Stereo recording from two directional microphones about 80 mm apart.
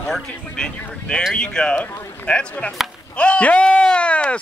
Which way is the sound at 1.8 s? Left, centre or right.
Left.